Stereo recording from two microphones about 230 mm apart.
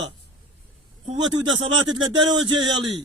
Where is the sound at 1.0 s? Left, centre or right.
Centre.